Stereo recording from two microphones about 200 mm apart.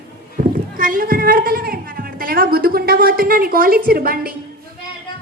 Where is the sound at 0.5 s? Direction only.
45° right (ahead or behind).